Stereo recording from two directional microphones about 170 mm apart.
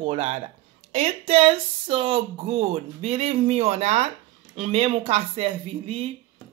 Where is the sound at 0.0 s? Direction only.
40° right (ahead or behind).